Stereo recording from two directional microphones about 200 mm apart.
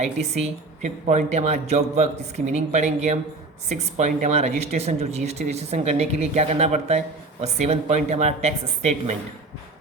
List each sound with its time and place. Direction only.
0.0 s speech: 35° right (ahead or behind)